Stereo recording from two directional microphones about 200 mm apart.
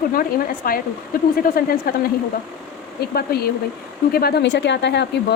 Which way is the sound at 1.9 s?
50° left (ahead or behind).